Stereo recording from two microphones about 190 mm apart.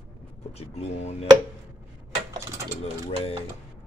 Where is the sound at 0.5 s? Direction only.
35° left (ahead or behind).